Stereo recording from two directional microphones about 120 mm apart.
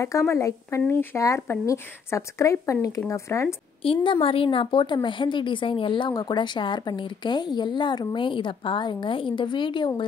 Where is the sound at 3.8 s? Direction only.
45° left (ahead or behind).